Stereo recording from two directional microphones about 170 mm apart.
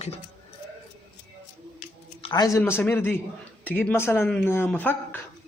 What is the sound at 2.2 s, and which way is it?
Speech, 25° left (ahead or behind).